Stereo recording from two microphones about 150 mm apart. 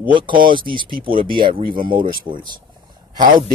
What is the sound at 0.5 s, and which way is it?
A man's voice, 35° right (ahead or behind).